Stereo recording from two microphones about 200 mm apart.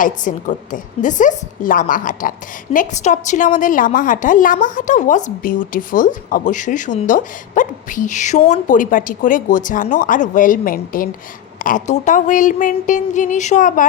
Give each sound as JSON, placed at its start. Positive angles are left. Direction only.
{"t": 0.0, "sound": "a woman's voice", "side_deg": 40}